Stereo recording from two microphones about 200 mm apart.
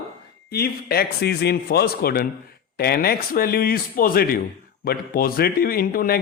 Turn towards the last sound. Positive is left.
turn(degrees=45)  # may be behind; listen again after turning